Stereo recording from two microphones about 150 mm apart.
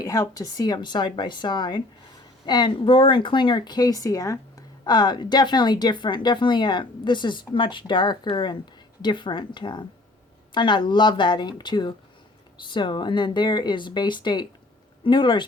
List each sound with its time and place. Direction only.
0.0 s a woman's voice: 25° left (ahead or behind)